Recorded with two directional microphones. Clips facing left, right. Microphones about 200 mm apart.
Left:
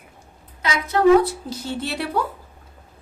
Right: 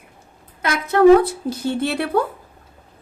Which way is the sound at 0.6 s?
55° right (ahead or behind).